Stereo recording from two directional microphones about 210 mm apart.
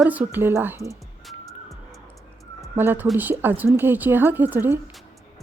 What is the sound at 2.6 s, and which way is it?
Speech, 10° right (ahead or behind).